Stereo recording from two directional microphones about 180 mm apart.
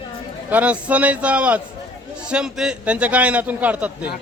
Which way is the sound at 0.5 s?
10° right (ahead or behind).